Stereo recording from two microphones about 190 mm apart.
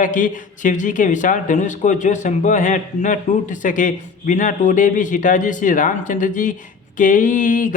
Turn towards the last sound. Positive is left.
turn(degrees=45)  # may be behind; listen again after turning